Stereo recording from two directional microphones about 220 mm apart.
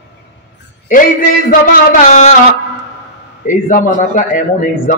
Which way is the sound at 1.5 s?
40° left (ahead or behind).